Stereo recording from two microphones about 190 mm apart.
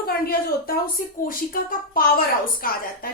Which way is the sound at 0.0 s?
55° left (ahead or behind).